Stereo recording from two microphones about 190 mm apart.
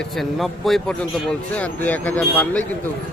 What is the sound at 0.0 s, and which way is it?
A man's voice, centre (ahead or behind).